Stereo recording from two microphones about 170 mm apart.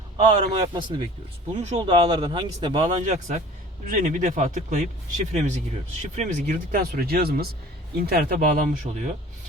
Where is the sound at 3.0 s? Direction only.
45° right (ahead or behind).